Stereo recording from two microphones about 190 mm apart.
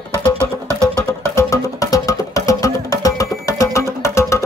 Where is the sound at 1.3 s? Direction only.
15° left (ahead or behind).